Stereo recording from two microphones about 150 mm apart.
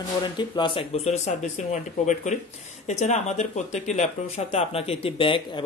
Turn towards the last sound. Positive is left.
turn(degrees=35)  # may be behind; listen again after turning